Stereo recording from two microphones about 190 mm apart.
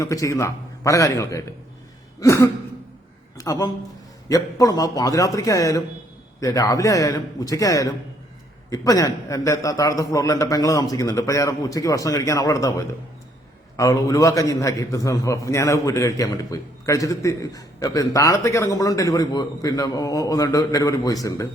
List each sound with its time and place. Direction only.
0.0 s a man's voice: 15° left (ahead or behind)